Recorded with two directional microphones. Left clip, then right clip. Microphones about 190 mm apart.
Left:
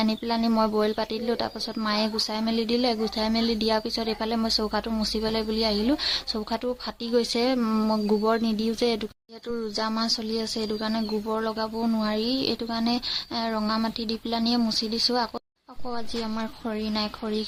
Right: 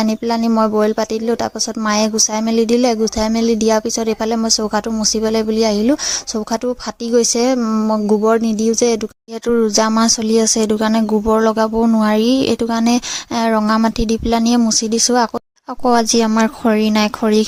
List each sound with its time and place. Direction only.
0.0 s speech: 35° right (ahead or behind)
9.5 s speech: 50° right (ahead or behind)
15.8 s speech: 60° right (ahead or behind)